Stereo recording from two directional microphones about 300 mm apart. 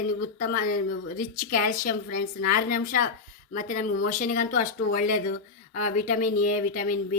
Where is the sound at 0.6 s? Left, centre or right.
Left.